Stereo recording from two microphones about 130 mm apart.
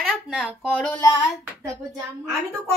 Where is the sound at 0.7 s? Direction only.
10° left (ahead or behind).